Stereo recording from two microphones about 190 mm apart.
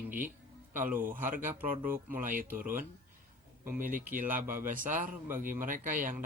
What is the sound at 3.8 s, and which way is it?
Speech, 45° right (ahead or behind).